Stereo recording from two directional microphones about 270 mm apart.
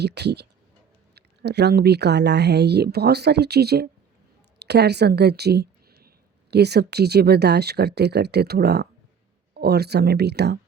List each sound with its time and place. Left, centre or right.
0.0 s speech: right